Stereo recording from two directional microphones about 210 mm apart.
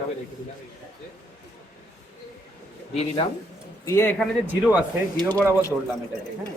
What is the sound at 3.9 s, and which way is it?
Speech, 10° left (ahead or behind).